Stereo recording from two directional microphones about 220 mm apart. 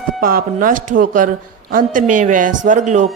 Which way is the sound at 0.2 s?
40° right (ahead or behind).